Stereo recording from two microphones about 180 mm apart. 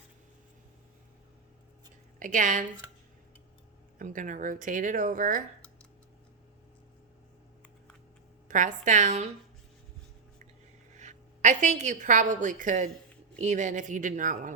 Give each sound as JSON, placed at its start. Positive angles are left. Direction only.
{"t": 2.1, "sound": "speech", "side_deg": -45}
{"t": 3.9, "sound": "speech", "side_deg": -45}
{"t": 8.4, "sound": "speech", "side_deg": -45}
{"t": 10.9, "sound": "a woman's voice", "side_deg": -40}